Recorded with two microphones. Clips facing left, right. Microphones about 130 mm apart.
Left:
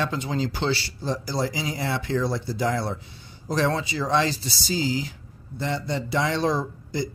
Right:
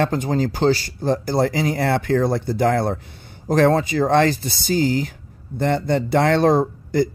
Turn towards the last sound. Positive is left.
turn(degrees=-55)  # may be behind; listen again after turning